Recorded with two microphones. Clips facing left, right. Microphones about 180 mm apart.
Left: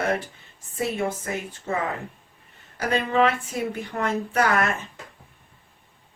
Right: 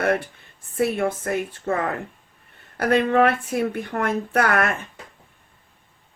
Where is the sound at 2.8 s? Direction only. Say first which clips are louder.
Right 4 dB; 55° right (ahead or behind).